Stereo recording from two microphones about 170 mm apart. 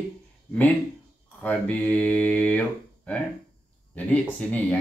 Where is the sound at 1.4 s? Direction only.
10° left (ahead or behind).